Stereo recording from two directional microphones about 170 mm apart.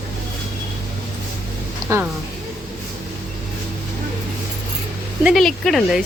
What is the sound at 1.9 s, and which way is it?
Speech, 15° right (ahead or behind).